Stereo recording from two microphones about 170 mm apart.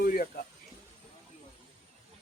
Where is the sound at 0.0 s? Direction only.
60° left (ahead or behind).